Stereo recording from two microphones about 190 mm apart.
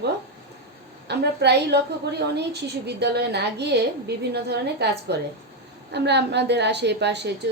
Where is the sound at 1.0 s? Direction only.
60° right (ahead or behind).